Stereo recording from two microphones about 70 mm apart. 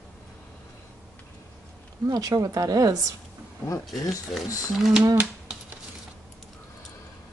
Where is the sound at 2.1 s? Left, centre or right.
Right.